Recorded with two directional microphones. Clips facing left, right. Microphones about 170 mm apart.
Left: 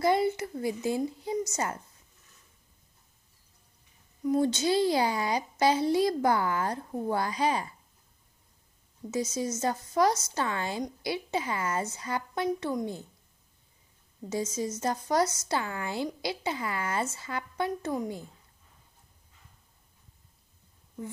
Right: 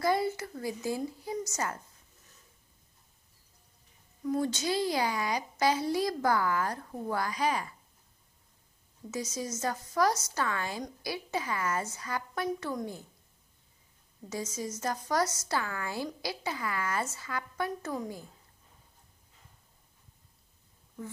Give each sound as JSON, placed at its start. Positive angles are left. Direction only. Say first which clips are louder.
{"t": 0.0, "sound": "a woman's voice", "louder": "left 3 dB", "side_deg": 25}
{"t": 4.2, "sound": "a woman's voice", "louder": "left 5 dB", "side_deg": 25}
{"t": 9.1, "sound": "a woman's voice", "louder": "left 5 dB", "side_deg": 25}
{"t": 14.3, "sound": "a woman's voice", "louder": "left 5 dB", "side_deg": 25}